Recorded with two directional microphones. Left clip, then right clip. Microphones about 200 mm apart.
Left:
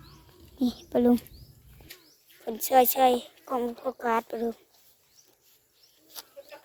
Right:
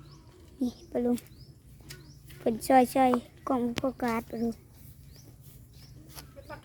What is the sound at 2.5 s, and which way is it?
A woman's voice, centre (ahead or behind).